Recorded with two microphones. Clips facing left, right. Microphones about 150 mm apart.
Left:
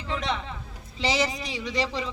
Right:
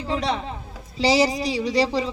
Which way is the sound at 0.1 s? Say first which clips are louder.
Right 5 dB; 35° right (ahead or behind).